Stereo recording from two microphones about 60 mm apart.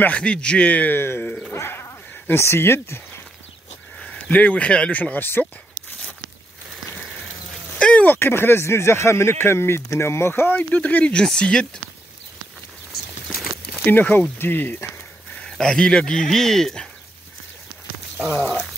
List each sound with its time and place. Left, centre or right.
0.0 s a man's voice: centre
0.9 s speech: left
1.5 s a sound: left
4.0 s speech: left
5.1 s speech: left
7.8 s a sound: centre
8.1 s speech: left
10.7 s a man's voice: left
13.8 s speech: left
15.6 s a man's voice: centre
18.4 s a sound: centre